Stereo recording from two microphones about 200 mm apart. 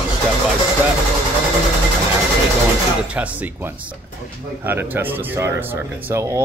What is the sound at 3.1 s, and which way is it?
Speech, 5° right (ahead or behind).